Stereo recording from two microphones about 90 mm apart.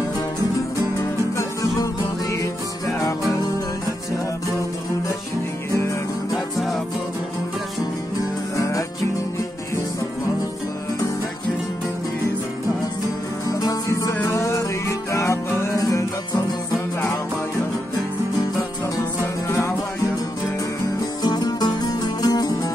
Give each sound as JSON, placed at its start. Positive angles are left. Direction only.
{"t": 1.3, "sound": "music", "side_deg": 40}
{"t": 6.3, "sound": "music", "side_deg": 0}
{"t": 8.5, "sound": "music", "side_deg": 35}
{"t": 13.5, "sound": "music", "side_deg": 45}
{"t": 21.2, "sound": "music", "side_deg": 50}